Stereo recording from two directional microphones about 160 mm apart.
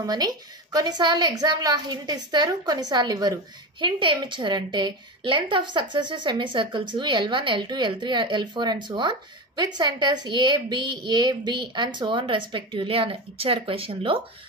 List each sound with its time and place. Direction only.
0.0 s a woman's voice: 25° right (ahead or behind)